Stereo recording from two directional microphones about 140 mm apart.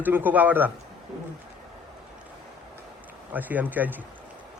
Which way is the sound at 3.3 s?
10° right (ahead or behind).